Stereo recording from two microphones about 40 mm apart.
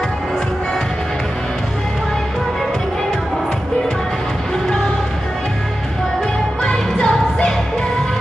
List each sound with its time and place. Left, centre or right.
6.6 s music: left